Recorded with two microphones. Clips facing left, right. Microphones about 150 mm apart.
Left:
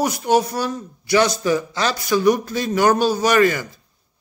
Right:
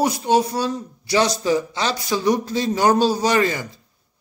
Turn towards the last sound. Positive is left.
turn(degrees=-25)  # may be behind; listen again after turning